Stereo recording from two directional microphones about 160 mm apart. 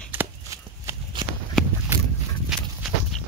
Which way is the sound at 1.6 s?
Centre (ahead or behind).